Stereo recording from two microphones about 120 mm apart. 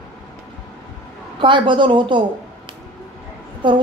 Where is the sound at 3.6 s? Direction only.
40° right (ahead or behind).